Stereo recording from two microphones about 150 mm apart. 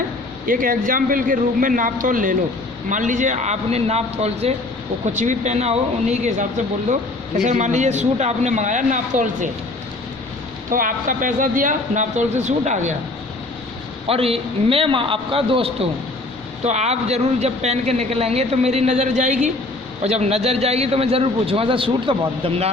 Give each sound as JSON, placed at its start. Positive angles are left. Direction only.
{"t": 0.4, "sound": "a man's voice", "side_deg": -65}
{"t": 10.7, "sound": "speech", "side_deg": -65}
{"t": 14.1, "sound": "a man's voice", "side_deg": -40}